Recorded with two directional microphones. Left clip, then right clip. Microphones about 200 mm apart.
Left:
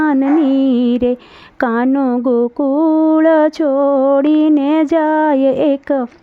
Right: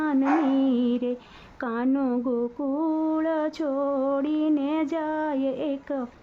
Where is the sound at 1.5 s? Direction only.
45° left (ahead or behind).